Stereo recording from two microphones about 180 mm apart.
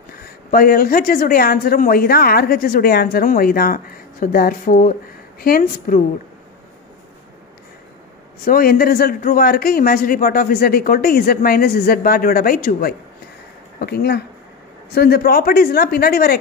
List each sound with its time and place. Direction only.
0.5 s speech: 55° left (ahead or behind)
8.5 s speech: 55° left (ahead or behind)